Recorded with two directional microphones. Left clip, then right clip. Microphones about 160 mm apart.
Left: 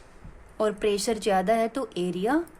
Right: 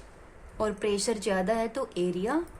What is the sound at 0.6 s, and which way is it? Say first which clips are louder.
Speech: left 4 dB; 30° left (ahead or behind).